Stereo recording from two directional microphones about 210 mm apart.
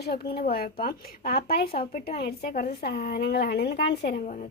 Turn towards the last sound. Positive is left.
turn(degrees=50)  # may be behind; listen again after turning